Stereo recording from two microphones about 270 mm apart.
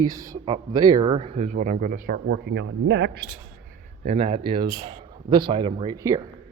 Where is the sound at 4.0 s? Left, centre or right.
Right.